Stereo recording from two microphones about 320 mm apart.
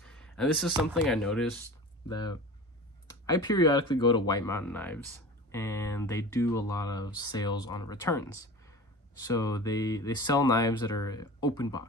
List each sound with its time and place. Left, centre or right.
0.0 s speech: centre
2.0 s speech: centre